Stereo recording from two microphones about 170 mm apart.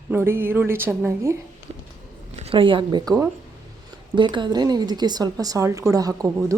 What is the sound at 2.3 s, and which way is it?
Speech, 35° right (ahead or behind).